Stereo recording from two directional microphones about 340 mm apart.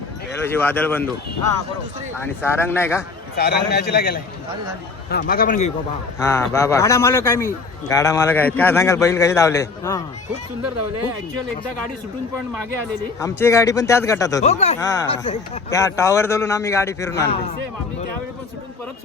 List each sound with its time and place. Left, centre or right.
0.3 s speech: centre
2.1 s speech: centre
3.3 s a man's voice: left
6.1 s speech: centre
13.2 s speech: centre